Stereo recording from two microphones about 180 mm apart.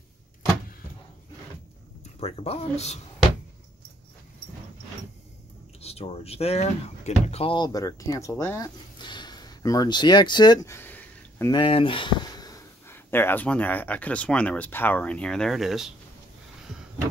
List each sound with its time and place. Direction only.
2.1 s speech: 35° left (ahead or behind)
5.8 s speech: 35° left (ahead or behind); by 11.5 s 10° left (ahead or behind)
11.5 s speech: 30° left (ahead or behind); by 15.9 s centre (ahead or behind)